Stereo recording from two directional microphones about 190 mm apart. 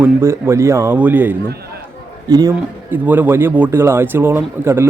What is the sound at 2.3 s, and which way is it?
Speech, 20° right (ahead or behind).